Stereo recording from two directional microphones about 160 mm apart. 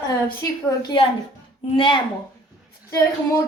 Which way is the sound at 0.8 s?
35° left (ahead or behind).